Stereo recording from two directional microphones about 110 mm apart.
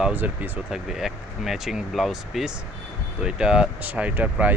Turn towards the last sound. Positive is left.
turn(degrees=-15)  # may be behind; listen again after turning